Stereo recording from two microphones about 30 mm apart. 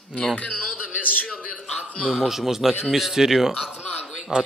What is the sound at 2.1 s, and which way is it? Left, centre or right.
Speech, centre.